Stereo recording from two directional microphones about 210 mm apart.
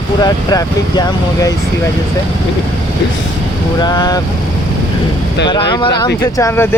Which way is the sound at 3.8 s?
20° left (ahead or behind).